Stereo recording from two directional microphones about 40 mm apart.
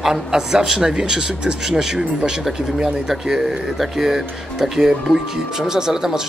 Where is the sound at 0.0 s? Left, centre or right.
Centre.